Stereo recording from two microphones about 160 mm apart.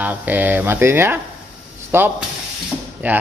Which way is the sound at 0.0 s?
10° right (ahead or behind).